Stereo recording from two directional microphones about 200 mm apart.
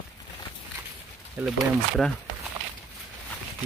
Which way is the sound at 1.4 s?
5° right (ahead or behind).